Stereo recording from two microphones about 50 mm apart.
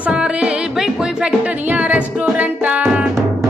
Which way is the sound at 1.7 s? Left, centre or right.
Right.